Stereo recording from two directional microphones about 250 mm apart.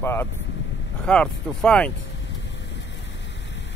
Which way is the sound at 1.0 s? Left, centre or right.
Centre.